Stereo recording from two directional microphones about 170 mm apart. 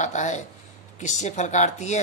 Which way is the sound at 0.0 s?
45° left (ahead or behind).